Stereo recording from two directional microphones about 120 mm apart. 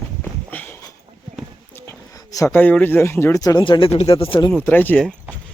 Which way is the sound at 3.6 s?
45° left (ahead or behind).